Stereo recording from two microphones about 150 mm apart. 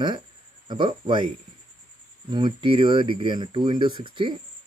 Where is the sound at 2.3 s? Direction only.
30° right (ahead or behind).